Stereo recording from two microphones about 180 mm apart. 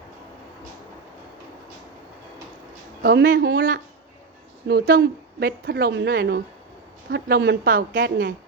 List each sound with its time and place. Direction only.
3.0 s a woman's voice: 55° right (ahead or behind)